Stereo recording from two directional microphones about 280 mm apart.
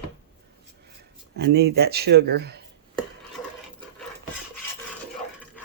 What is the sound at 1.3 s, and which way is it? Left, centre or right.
Speech, right.